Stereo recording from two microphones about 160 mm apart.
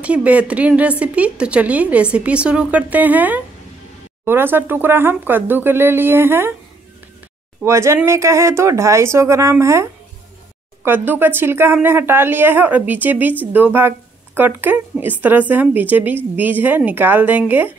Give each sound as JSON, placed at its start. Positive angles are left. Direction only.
{"t": 0.0, "sound": "speech", "side_deg": -10}
{"t": 7.6, "sound": "speech", "side_deg": -20}